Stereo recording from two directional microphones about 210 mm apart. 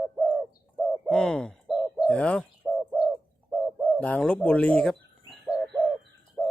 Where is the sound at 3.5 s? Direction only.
10° right (ahead or behind).